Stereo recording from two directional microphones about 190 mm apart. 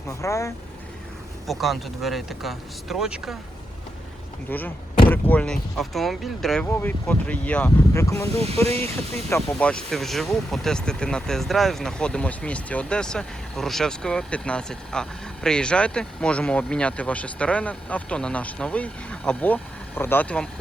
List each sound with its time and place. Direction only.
0.1 s speech: 15° left (ahead or behind)
1.5 s speech: centre (ahead or behind)
4.4 s speech: 10° left (ahead or behind)